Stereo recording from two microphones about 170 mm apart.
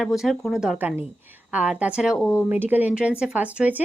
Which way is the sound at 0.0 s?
Centre (ahead or behind).